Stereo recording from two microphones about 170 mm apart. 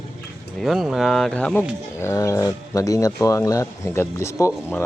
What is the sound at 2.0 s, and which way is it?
A man's voice, 15° left (ahead or behind).